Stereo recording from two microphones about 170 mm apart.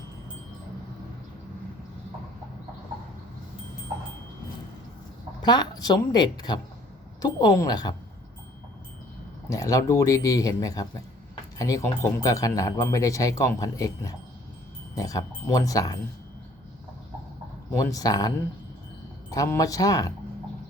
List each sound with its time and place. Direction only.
5.5 s speech: 25° left (ahead or behind)
9.5 s speech: 20° left (ahead or behind)
17.7 s speech: 20° left (ahead or behind)